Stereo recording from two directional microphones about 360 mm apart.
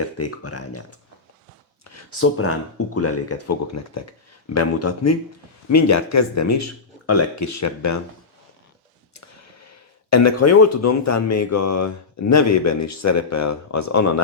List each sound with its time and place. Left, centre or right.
0.2 s speech: left
10.1 s speech: left